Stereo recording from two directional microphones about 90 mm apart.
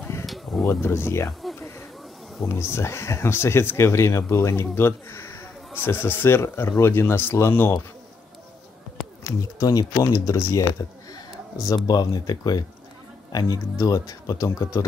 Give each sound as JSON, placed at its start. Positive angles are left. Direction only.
{"t": 0.7, "sound": "speech", "side_deg": 25}
{"t": 2.4, "sound": "speech", "side_deg": 30}
{"t": 9.2, "sound": "speech", "side_deg": 40}